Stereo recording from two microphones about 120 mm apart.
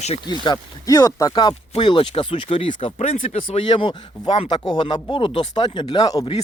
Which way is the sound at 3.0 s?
60° left (ahead or behind).